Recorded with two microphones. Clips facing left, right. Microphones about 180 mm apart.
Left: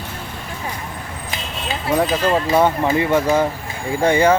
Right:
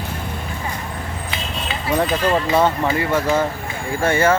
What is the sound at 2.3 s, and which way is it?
Speech, 15° left (ahead or behind).